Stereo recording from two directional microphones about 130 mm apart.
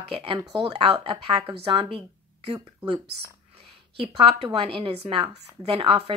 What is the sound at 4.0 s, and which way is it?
Speech, 45° right (ahead or behind).